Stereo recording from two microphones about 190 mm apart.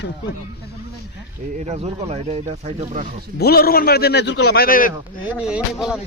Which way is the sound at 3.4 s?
55° left (ahead or behind).